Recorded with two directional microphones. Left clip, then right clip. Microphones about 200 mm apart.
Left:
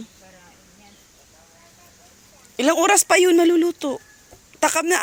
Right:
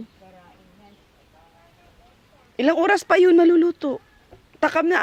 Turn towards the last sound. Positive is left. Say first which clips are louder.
# even
turn(degrees=-10)  # may be behind; listen again after turning